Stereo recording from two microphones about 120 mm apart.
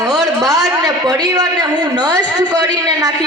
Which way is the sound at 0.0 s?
30° right (ahead or behind).